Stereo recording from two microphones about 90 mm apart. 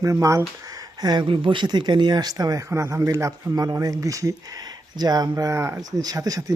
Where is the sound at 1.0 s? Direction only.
50° right (ahead or behind).